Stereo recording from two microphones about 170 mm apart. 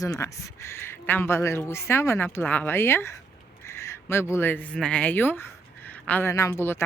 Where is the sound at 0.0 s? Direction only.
20° left (ahead or behind).